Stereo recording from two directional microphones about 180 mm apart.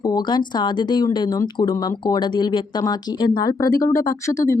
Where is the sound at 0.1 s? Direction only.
25° left (ahead or behind).